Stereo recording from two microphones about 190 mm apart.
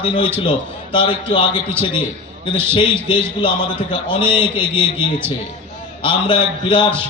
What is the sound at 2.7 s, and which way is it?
A man's voice, 25° left (ahead or behind).